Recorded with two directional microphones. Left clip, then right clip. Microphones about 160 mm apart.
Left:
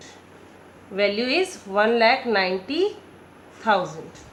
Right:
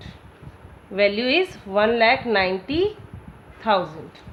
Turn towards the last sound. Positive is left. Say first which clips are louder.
# even
turn(degrees=-50)  # may be behind; listen again after turning